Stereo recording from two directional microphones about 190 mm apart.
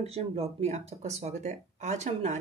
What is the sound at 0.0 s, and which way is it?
Speech, 35° right (ahead or behind).